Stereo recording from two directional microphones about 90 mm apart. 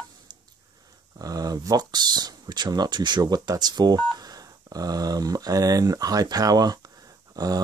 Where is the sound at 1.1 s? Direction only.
45° right (ahead or behind).